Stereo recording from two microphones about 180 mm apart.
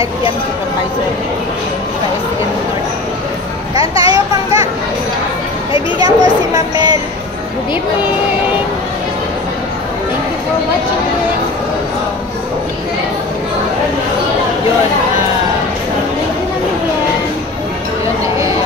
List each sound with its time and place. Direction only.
3.7 s speech: 30° left (ahead or behind)
4.1 s children playing: 20° right (ahead or behind)
5.9 s speech: 20° right (ahead or behind)